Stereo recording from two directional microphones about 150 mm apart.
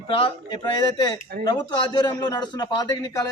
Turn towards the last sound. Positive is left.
turn(degrees=25)  # may be behind; listen again after turning